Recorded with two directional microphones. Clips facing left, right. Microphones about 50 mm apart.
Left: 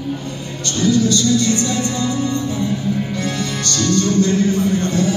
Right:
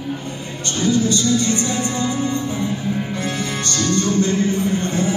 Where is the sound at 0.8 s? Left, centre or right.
Right.